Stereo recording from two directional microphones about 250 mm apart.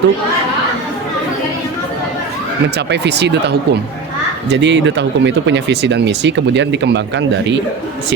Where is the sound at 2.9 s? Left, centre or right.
Right.